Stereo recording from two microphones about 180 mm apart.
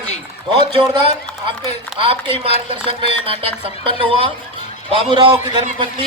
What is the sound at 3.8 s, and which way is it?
A woman's voice, 30° right (ahead or behind).